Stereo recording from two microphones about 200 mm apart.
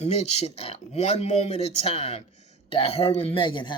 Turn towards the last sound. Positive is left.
turn(degrees=25)  # may be behind; listen again after turning